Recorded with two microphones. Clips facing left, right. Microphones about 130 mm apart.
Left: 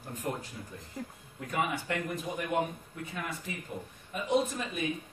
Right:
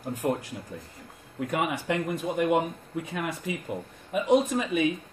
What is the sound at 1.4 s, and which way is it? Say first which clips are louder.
Speech: right 4 dB; 90° right.